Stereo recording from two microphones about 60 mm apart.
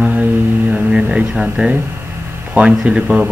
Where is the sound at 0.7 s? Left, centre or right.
Centre.